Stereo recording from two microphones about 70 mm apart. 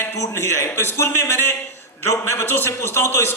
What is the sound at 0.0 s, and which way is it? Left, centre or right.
A man's voice, left.